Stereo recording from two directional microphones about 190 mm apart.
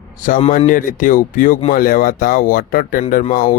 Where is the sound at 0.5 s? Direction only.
45° left (ahead or behind).